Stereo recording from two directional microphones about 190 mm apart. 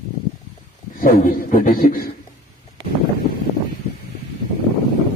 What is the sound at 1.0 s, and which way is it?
A man's voice, 45° left (ahead or behind).